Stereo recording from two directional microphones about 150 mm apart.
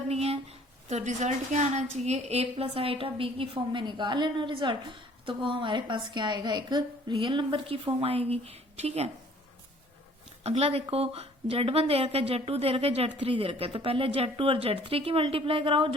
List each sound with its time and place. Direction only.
0.1 s a sound: 45° right (ahead or behind)
0.9 s a woman's voice: 50° right (ahead or behind)
10.4 s a woman's voice: 45° right (ahead or behind)